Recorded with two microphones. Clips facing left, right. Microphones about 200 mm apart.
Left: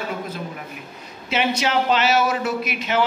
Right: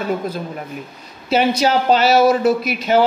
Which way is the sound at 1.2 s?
35° right (ahead or behind).